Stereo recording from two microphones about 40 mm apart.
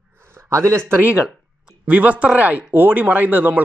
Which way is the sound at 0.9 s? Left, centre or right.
Right.